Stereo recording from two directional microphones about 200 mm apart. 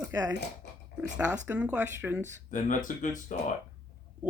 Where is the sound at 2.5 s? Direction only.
40° left (ahead or behind).